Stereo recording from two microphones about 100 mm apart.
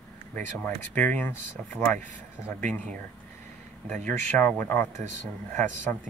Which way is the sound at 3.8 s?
15° left (ahead or behind).